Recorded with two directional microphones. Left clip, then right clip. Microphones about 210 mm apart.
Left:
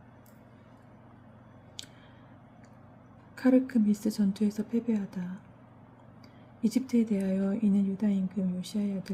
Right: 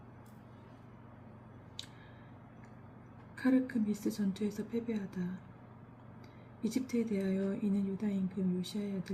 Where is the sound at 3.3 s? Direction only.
50° left (ahead or behind).